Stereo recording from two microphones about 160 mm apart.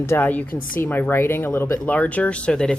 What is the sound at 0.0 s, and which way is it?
A woman's voice, 15° left (ahead or behind).